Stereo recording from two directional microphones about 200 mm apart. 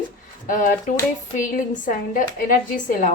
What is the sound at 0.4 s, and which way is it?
A woman's voice, 40° left (ahead or behind).